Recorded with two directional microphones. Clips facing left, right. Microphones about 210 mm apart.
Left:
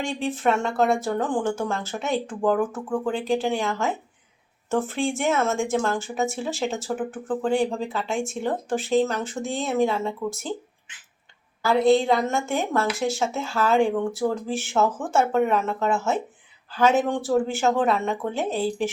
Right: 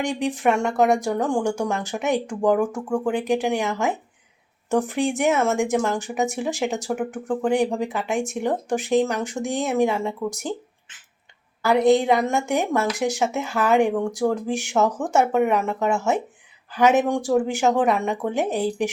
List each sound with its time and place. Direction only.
0.0 s speech: 15° right (ahead or behind)
11.6 s speech: 15° right (ahead or behind)